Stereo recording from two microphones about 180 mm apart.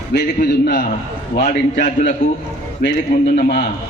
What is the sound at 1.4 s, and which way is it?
Speech, 45° left (ahead or behind).